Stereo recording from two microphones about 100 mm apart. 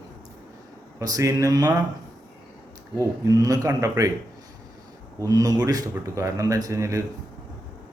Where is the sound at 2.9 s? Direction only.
35° right (ahead or behind).